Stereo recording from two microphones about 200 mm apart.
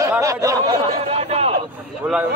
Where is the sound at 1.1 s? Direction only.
30° right (ahead or behind).